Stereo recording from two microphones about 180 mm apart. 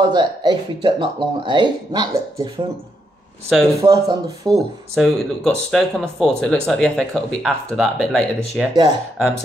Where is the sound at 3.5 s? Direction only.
Centre (ahead or behind).